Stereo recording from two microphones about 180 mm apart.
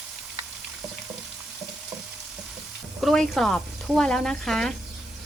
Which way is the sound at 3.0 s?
Centre (ahead or behind).